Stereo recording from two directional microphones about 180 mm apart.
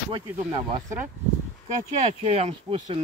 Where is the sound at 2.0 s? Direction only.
35° right (ahead or behind).